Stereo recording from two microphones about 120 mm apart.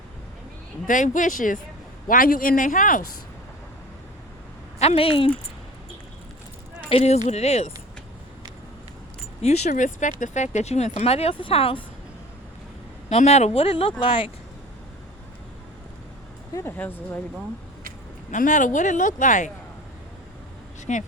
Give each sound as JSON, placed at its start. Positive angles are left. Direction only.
{"t": 0.9, "sound": "speech", "side_deg": 90}
{"t": 2.6, "sound": "speech", "side_deg": 90}
{"t": 4.8, "sound": "speech", "side_deg": 55}
{"t": 6.9, "sound": "speech", "side_deg": 65}
{"t": 9.4, "sound": "speech", "side_deg": 65}
{"t": 13.1, "sound": "speech", "side_deg": 65}
{"t": 16.6, "sound": "speech", "side_deg": 15}
{"t": 18.3, "sound": "speech", "side_deg": 90}
{"t": 20.9, "sound": "speech", "side_deg": 85}